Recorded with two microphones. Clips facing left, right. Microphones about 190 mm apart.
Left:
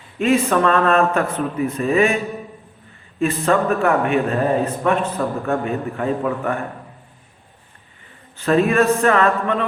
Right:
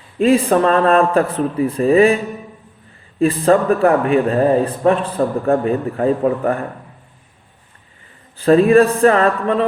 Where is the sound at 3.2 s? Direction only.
35° right (ahead or behind).